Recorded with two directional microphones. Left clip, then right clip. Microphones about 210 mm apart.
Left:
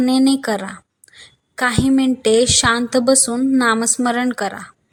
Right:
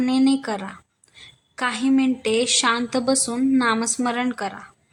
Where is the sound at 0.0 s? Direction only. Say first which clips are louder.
Left 4 dB; 20° left (ahead or behind).